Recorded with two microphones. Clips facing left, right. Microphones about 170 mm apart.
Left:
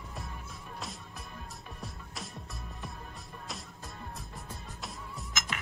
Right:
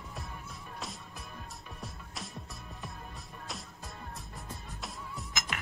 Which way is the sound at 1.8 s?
Centre (ahead or behind).